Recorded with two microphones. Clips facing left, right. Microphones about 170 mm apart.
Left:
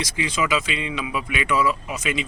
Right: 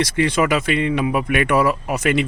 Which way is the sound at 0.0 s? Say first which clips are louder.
Right 7 dB; 65° right (ahead or behind).